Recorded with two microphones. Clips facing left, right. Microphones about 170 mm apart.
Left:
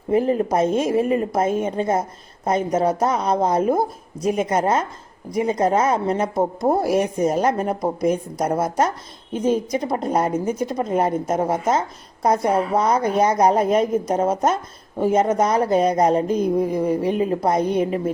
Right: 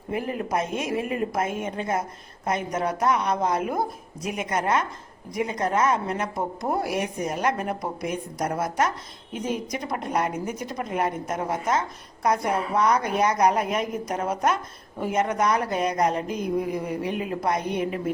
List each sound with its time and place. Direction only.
0.1 s a woman's voice: 30° left (ahead or behind)
8.4 s a woman's voice: 30° left (ahead or behind)